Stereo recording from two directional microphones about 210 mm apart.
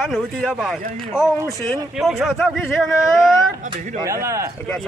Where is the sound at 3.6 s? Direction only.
35° right (ahead or behind).